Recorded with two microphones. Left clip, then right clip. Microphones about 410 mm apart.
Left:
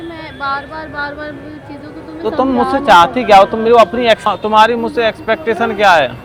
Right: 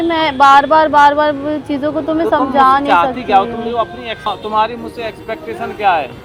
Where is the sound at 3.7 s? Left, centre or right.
Left.